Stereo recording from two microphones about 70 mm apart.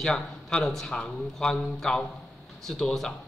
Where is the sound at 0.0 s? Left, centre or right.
Centre.